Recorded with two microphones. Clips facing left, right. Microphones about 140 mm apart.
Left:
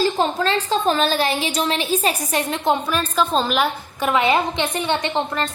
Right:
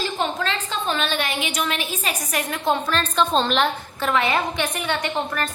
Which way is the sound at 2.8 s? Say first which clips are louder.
Left 1 dB; 10° left (ahead or behind).